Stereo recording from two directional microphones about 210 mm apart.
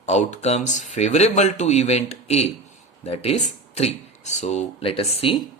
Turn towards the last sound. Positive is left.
turn(degrees=25)  # may be behind; listen again after turning